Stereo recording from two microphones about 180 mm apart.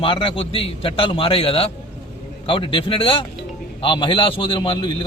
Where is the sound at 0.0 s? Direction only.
30° left (ahead or behind).